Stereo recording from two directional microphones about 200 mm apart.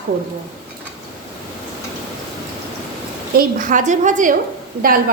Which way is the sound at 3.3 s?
40° right (ahead or behind).